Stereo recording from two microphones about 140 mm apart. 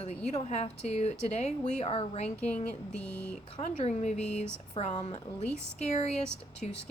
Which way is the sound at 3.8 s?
50° left (ahead or behind).